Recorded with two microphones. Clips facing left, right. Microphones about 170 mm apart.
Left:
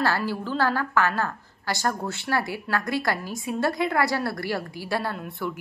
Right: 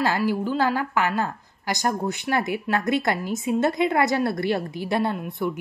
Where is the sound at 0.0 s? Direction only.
15° right (ahead or behind).